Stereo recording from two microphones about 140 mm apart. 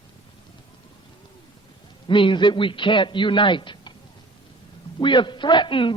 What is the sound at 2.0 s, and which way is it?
A man's voice, 35° left (ahead or behind).